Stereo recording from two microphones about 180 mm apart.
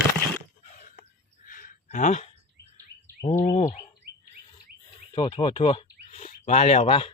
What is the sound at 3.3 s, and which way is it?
Bird, 40° left (ahead or behind).